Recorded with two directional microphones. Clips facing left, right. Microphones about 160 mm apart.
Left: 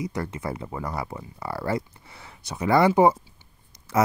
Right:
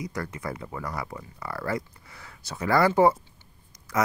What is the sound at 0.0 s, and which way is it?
Speech, 25° left (ahead or behind).